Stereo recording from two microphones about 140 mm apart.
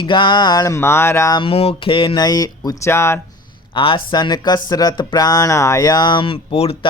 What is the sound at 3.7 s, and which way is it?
Speech, 35° left (ahead or behind).